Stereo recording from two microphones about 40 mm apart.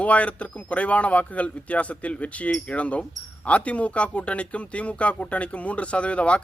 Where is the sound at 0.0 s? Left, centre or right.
Left.